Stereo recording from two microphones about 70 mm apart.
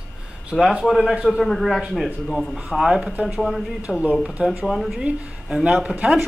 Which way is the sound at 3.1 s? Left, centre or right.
Right.